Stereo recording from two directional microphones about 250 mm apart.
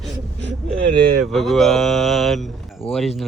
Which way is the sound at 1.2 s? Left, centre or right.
Centre.